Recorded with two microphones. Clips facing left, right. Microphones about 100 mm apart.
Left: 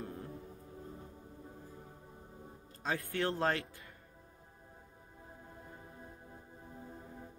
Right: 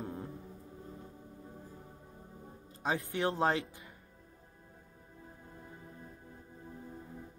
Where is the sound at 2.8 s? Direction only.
15° right (ahead or behind).